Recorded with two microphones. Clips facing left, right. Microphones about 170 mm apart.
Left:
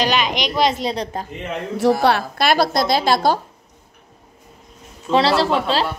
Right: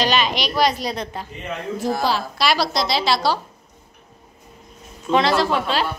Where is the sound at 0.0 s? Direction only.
15° left (ahead or behind).